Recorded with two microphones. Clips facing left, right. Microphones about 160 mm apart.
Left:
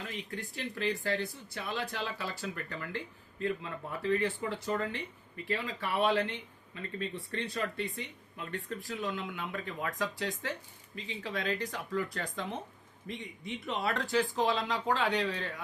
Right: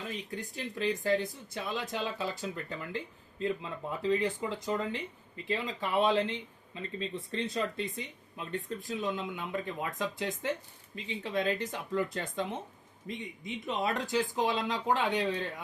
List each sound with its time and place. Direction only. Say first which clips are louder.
0.1 s speech: right 2 dB; 15° right (ahead or behind)